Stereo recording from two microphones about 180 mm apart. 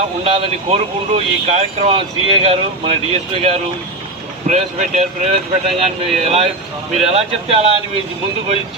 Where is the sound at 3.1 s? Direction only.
35° right (ahead or behind).